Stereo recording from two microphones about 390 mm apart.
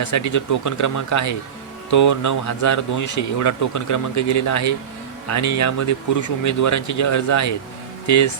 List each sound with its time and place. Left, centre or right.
0.0 s speech: left